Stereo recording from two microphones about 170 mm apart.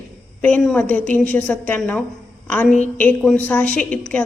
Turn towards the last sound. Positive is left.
turn(degrees=5)  # may be behind; listen again after turning